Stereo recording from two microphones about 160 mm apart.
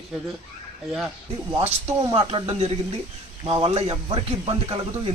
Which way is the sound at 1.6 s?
40° right (ahead or behind).